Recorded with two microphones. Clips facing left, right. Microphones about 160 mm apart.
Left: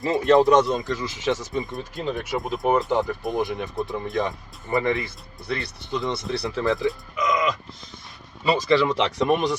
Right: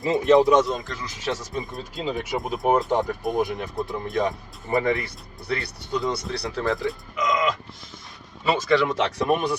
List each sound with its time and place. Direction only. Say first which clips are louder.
0.0 s speech: even; 20° right (ahead or behind)
0.4 s speech: left 1 dB; centre (ahead or behind)
8.4 s speech: left 1 dB; centre (ahead or behind)